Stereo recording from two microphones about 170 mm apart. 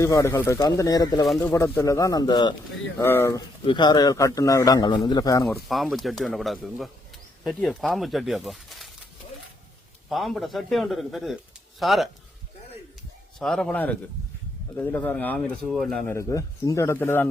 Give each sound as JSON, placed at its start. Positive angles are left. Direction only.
{"t": 0.0, "sound": "a man's voice", "side_deg": 20}
{"t": 3.0, "sound": "speech", "side_deg": 15}
{"t": 3.6, "sound": "a man's voice", "side_deg": 30}
{"t": 5.5, "sound": "speech", "side_deg": 0}
{"t": 10.1, "sound": "speech", "side_deg": 0}
{"t": 13.4, "sound": "speech", "side_deg": 0}
{"t": 16.0, "sound": "speech", "side_deg": 15}